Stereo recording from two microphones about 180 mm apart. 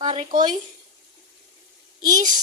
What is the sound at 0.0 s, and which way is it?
Speech, 30° right (ahead or behind).